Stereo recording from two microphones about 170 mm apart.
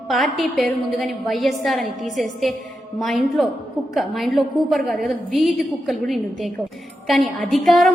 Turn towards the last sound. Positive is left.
turn(degrees=0)  # may be behind; listen again after turning